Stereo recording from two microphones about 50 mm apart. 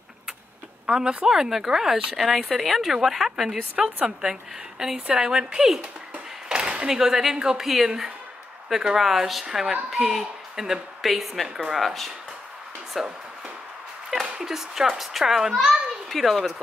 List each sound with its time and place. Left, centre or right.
0.8 s a woman's voice: centre
5.8 s a sound: centre
7.0 s a woman's voice: centre
14.4 s a woman's voice: centre